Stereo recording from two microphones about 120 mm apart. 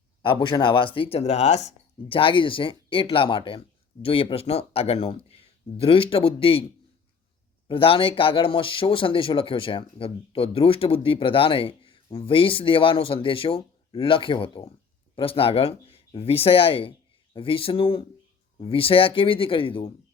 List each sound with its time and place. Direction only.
0.2 s speech: 40° left (ahead or behind); by 1.7 s 70° left (ahead or behind)
2.0 s speech: 45° left (ahead or behind)
7.7 s speech: 50° left (ahead or behind)